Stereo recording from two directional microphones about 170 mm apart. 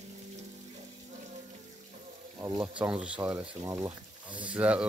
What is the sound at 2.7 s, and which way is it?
Speech, 5° right (ahead or behind).